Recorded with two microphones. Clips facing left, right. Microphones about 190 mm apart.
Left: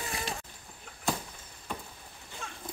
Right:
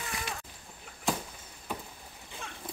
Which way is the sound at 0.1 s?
30° left (ahead or behind).